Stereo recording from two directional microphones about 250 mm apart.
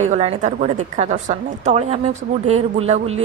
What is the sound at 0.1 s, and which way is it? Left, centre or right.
A woman's voice, right.